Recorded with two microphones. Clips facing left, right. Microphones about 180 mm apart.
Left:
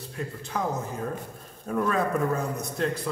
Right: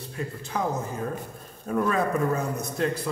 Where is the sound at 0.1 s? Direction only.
Centre (ahead or behind).